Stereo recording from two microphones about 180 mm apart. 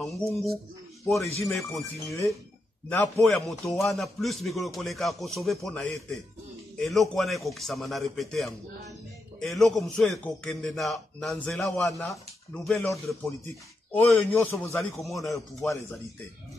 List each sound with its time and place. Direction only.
0.0 s speech: centre (ahead or behind)
2.9 s a man's voice: 10° left (ahead or behind)
14.8 s speech: centre (ahead or behind)